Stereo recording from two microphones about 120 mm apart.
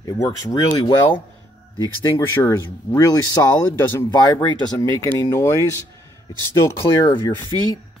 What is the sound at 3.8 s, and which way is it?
Speech, 20° left (ahead or behind).